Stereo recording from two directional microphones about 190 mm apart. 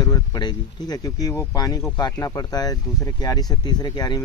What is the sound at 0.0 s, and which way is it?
Speech, 20° left (ahead or behind).